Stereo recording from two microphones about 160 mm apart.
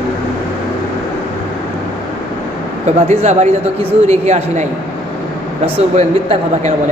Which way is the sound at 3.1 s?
45° right (ahead or behind).